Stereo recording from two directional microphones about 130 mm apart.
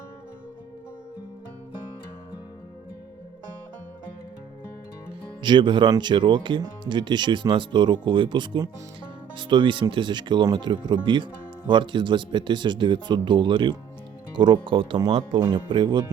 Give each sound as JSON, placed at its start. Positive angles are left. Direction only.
{"t": 5.4, "sound": "speech", "side_deg": -35}